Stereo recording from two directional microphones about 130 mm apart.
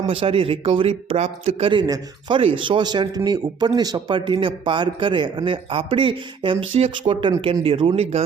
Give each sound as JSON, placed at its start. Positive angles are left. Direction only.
{"t": 0.1, "sound": "speech", "side_deg": -45}
{"t": 1.9, "sound": "a man's voice", "side_deg": -35}